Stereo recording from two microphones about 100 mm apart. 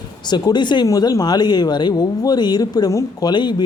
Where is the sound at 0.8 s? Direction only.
35° left (ahead or behind).